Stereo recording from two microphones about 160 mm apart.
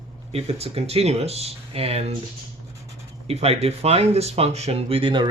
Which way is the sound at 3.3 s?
40° right (ahead or behind).